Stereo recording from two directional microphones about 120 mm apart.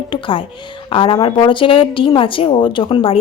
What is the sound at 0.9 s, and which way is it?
A woman's voice, 50° left (ahead or behind).